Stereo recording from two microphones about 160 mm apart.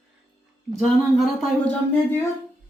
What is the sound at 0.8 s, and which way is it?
Speech, centre (ahead or behind).